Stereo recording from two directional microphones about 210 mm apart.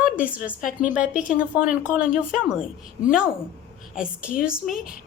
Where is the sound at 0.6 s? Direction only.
40° left (ahead or behind).